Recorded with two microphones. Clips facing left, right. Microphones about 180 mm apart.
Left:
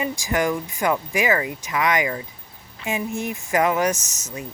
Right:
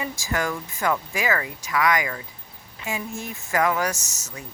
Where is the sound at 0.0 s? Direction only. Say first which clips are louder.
Left 5 dB; 15° left (ahead or behind).